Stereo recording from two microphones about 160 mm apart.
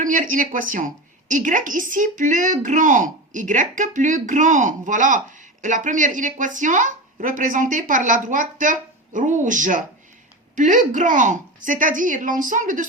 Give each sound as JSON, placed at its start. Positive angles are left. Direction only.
{"t": 0.0, "sound": "a woman's voice", "side_deg": -55}